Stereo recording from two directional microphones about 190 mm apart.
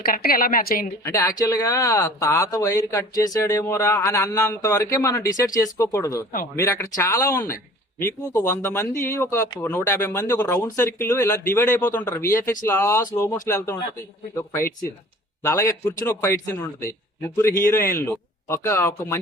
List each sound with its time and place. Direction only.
0.0 s a woman's voice: 50° left (ahead or behind)
1.0 s speech: 15° left (ahead or behind)